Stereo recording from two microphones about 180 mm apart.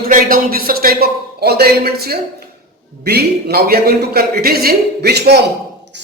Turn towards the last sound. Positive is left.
turn(degrees=-65)  # may be behind; listen again after turning